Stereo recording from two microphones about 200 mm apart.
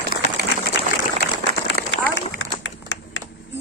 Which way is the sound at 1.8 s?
50° right (ahead or behind).